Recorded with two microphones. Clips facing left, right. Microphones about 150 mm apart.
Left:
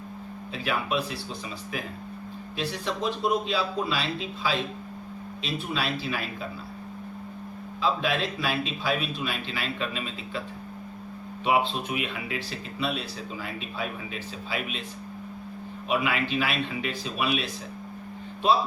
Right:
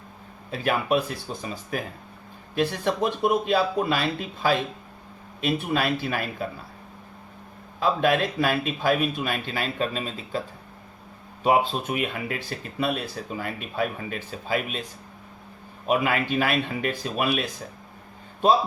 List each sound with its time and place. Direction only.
0.5 s speech: 50° right (ahead or behind)
7.8 s speech: 50° right (ahead or behind)
11.4 s speech: 40° right (ahead or behind)
15.9 s speech: 45° right (ahead or behind)